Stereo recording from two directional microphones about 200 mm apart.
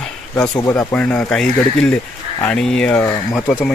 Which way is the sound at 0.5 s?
15° left (ahead or behind).